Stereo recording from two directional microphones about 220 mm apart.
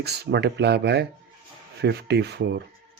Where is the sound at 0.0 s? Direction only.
50° right (ahead or behind).